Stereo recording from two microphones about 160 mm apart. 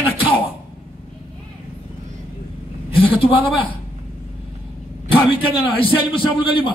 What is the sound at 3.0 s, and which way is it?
Speech, 35° left (ahead or behind).